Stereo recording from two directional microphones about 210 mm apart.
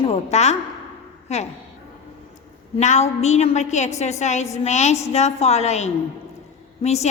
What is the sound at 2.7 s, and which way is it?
A woman's voice, 35° left (ahead or behind).